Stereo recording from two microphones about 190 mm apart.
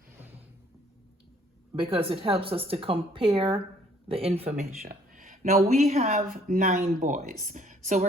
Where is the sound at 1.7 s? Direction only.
25° right (ahead or behind).